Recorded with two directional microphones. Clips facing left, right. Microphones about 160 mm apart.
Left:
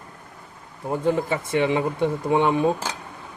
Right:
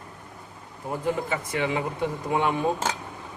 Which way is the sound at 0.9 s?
25° left (ahead or behind).